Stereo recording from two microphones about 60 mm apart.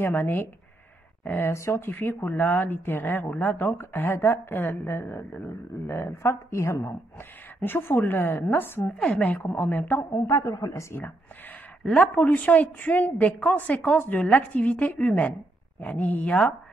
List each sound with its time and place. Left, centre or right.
0.0 s speech: left
1.5 s a woman's voice: left
1.8 s a woman's voice: left
7.6 s speech: left
8.8 s a woman's voice: centre
9.9 s a woman's voice: left
10.7 s a woman's voice: left
11.8 s a woman's voice: centre